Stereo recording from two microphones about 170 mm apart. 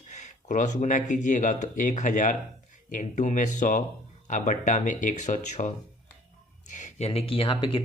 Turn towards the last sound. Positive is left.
turn(degrees=30)  # may be behind; listen again after turning